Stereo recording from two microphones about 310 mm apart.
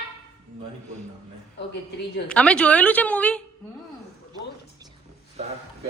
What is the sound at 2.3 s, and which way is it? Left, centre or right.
A woman's voice, centre.